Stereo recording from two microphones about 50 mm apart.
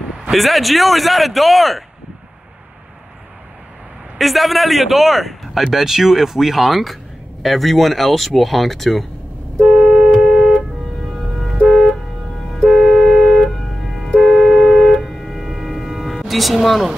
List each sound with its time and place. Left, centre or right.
0.3 s speech: centre
4.2 s speech: centre
9.7 s vehicle: centre
11.6 s vehicle: centre
12.6 s a sound: centre
14.0 s vehicle: centre